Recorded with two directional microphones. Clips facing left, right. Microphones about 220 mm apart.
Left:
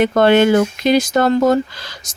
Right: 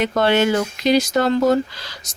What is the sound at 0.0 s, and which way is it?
Speech, 50° left (ahead or behind).